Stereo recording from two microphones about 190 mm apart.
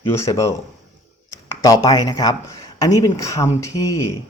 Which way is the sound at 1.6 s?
15° left (ahead or behind).